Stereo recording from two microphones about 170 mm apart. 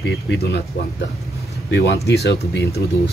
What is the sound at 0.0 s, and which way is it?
Speech, 80° left.